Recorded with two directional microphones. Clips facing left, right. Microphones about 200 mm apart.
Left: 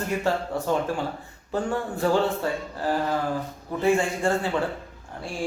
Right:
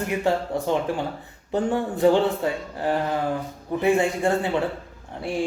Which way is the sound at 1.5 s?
20° right (ahead or behind).